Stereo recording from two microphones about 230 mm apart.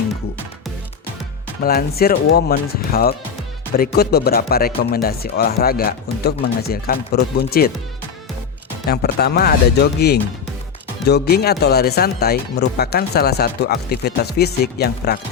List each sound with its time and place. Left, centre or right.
1.6 s speech: left
8.9 s speech: left